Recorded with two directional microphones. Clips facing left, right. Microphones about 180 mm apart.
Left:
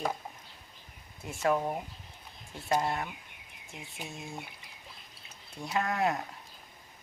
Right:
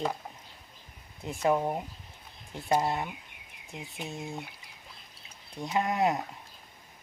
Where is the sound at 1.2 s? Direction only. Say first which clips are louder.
Right 2 dB; 20° right (ahead or behind).